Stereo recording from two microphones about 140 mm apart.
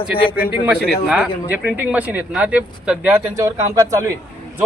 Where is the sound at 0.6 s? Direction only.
5° right (ahead or behind).